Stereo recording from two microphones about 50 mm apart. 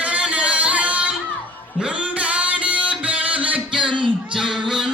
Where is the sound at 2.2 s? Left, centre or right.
Right.